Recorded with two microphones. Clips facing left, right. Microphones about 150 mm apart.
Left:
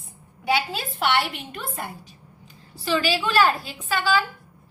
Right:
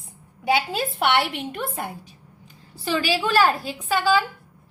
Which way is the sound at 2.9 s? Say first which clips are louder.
Even; 15° right (ahead or behind).